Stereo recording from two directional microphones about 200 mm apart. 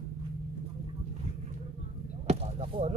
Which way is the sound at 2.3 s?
30° right (ahead or behind).